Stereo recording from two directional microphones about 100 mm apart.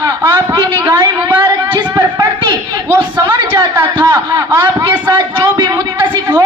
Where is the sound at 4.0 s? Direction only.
45° right (ahead or behind).